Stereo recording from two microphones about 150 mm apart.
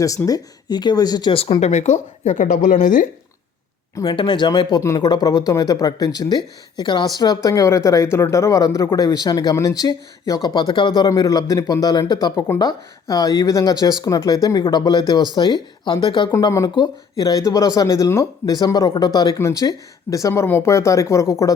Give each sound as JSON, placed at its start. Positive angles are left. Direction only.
{"t": 0.3, "sound": "speech", "side_deg": 25}
{"t": 4.0, "sound": "speech", "side_deg": 35}